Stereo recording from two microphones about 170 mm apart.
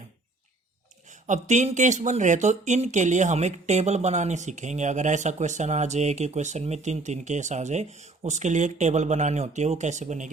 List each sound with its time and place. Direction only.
1.0 s speech: 45° right (ahead or behind)